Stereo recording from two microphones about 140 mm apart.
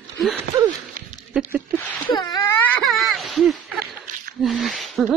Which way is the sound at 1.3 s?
10° right (ahead or behind).